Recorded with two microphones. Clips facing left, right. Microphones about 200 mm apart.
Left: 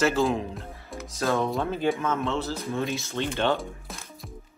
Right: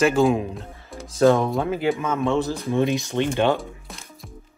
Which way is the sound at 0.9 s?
30° right (ahead or behind).